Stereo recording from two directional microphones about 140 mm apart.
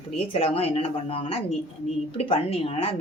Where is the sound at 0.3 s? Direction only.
45° left (ahead or behind).